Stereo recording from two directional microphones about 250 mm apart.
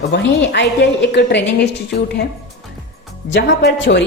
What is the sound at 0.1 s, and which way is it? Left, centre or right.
A woman's voice, left.